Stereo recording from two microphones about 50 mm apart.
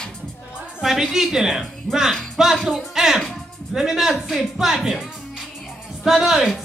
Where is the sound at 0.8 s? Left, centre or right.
Centre.